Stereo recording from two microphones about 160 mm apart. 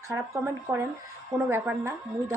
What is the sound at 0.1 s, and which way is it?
A woman's voice, 15° right (ahead or behind).